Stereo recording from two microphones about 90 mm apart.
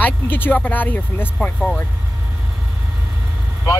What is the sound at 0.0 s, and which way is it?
Speech, 20° left (ahead or behind).